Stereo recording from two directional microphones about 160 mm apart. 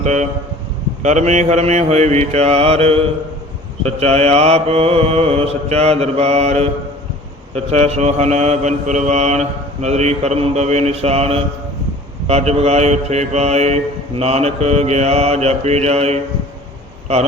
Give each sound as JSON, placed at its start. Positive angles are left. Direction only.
{"t": 0.0, "sound": "speech", "side_deg": -45}
{"t": 1.0, "sound": "mantra", "side_deg": -45}